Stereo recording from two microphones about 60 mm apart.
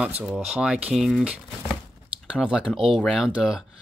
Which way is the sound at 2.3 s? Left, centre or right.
Centre.